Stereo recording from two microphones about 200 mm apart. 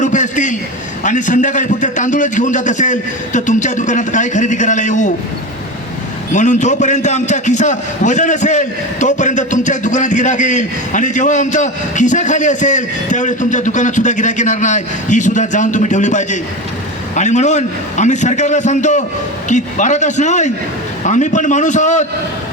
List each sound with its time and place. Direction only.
0.0 s a man's voice: 40° left (ahead or behind)
6.3 s a man's voice: 35° left (ahead or behind)